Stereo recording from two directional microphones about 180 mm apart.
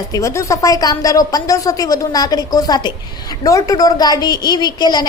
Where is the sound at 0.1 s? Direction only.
15° left (ahead or behind).